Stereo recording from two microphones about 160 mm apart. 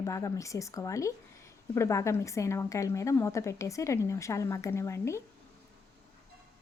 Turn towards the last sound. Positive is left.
turn(degrees=15)  # may be behind; listen again after turning